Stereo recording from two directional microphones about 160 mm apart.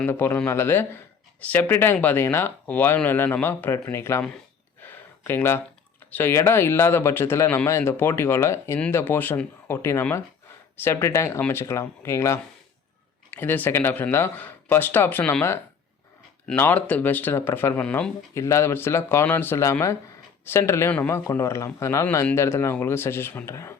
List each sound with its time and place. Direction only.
0.0 s a man's voice: 15° left (ahead or behind)
4.9 s a sound: 15° left (ahead or behind)
6.1 s a man's voice: 10° left (ahead or behind)